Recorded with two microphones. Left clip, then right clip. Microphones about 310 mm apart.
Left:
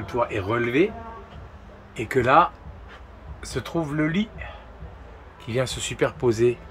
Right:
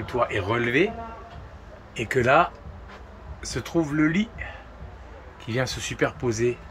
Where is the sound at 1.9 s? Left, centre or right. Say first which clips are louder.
Left 2 dB; centre.